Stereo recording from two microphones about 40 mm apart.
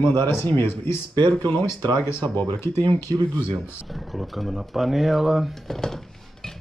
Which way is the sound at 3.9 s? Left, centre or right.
Centre.